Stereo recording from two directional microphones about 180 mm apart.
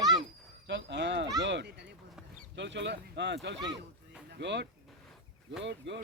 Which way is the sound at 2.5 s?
75° right (ahead or behind).